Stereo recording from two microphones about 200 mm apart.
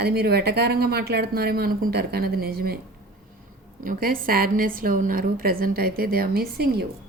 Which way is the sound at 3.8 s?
45° right (ahead or behind).